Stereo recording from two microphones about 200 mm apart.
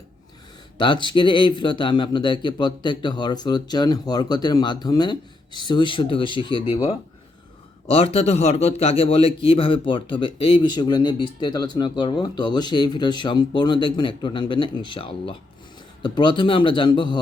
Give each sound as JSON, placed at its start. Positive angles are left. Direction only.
{"t": 0.8, "sound": "a man's voice", "side_deg": 25}